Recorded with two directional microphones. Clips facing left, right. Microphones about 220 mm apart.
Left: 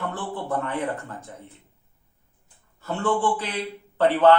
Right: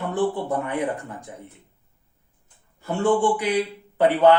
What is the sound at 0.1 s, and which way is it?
A man's voice, 15° right (ahead or behind).